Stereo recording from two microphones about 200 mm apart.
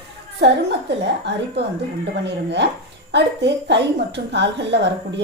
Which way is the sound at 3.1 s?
60° right (ahead or behind).